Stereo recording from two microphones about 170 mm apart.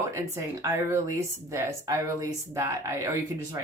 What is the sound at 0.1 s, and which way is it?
Speech, 15° right (ahead or behind).